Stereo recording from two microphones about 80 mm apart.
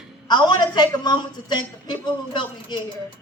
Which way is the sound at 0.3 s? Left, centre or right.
Left.